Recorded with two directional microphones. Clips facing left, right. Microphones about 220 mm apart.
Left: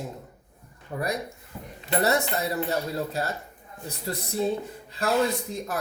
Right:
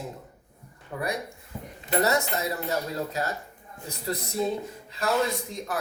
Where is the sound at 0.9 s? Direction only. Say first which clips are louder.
Left 2 dB; 35° left (ahead or behind).